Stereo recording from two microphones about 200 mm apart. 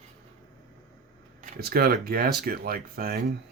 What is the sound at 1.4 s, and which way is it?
Speech, 50° right (ahead or behind).